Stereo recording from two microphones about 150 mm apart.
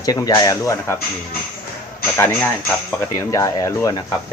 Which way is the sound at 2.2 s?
15° left (ahead or behind).